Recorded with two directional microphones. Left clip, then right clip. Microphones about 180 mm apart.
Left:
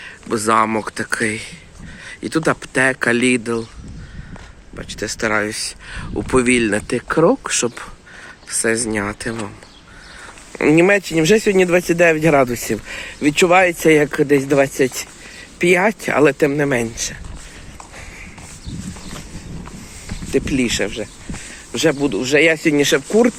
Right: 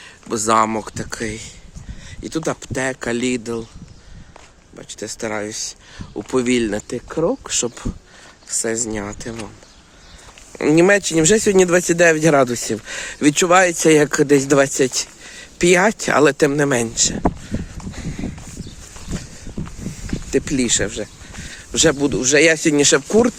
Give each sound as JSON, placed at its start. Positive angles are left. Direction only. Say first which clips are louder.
{"t": 0.0, "sound": "speech", "louder": "left 2 dB", "side_deg": -25}
{"t": 4.8, "sound": "speech", "louder": "left 5 dB", "side_deg": -15}
{"t": 7.5, "sound": "speech", "louder": "left 2 dB", "side_deg": -15}
{"t": 10.5, "sound": "speech", "louder": "left 2 dB", "side_deg": -25}
{"t": 10.8, "sound": "speech", "louder": "right 2 dB", "side_deg": -35}
{"t": 13.0, "sound": "speech", "louder": "left 1 dB", "side_deg": -50}
{"t": 13.6, "sound": "speech", "louder": "even", "side_deg": -40}
{"t": 20.3, "sound": "speech", "louder": "left 1 dB", "side_deg": -40}